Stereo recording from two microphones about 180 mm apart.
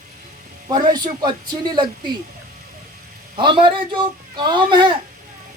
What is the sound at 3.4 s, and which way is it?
Speech, 25° right (ahead or behind).